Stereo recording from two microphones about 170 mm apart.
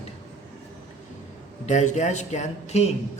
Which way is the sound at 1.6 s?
45° left (ahead or behind).